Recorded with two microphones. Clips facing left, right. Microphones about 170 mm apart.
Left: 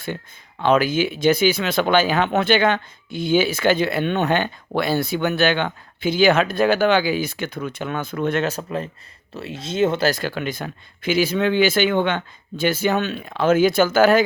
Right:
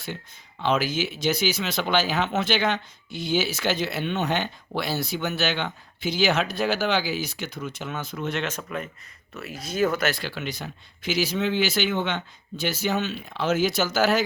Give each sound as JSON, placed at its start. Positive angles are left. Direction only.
{"t": 0.6, "sound": "speech", "side_deg": 55}
{"t": 8.4, "sound": "speech", "side_deg": 35}
{"t": 10.1, "sound": "speech", "side_deg": 45}